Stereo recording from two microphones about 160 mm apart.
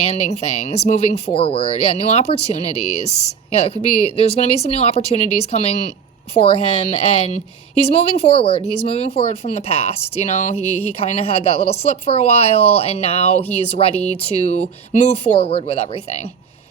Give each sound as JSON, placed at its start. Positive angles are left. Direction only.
{"t": 0.1, "sound": "speech", "side_deg": 40}